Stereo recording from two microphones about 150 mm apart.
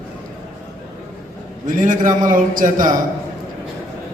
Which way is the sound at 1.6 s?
60° right (ahead or behind).